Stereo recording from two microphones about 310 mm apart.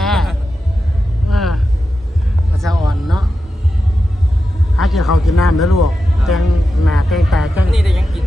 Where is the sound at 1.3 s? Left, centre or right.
Centre.